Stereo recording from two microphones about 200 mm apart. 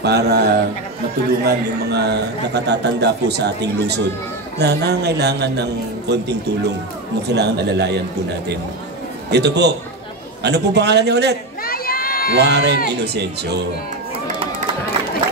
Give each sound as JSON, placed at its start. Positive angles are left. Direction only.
{"t": 0.0, "sound": "a man's voice", "side_deg": -55}
{"t": 9.3, "sound": "a man's voice", "side_deg": -55}
{"t": 11.6, "sound": "crowd", "side_deg": 45}
{"t": 12.4, "sound": "a man's voice", "side_deg": -60}